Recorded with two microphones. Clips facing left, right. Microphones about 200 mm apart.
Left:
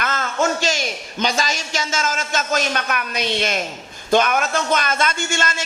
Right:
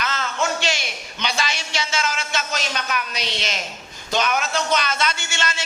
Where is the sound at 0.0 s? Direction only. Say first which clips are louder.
Left 4 dB; 50° left (ahead or behind).